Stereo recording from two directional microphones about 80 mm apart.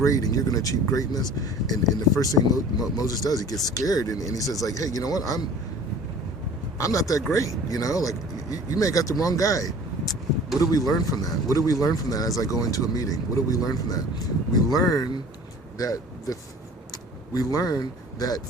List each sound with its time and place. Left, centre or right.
0.0 s speech: left
6.7 s speech: left